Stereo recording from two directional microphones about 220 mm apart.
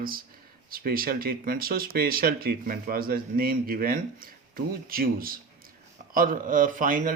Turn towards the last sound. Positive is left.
turn(degrees=-35)  # may be behind; listen again after turning